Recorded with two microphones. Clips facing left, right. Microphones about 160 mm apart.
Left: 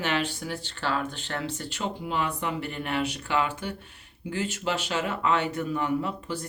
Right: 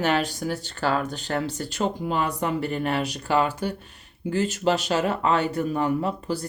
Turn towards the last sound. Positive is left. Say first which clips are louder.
# right 3 dB
turn(degrees=-35)  # may be behind; listen again after turning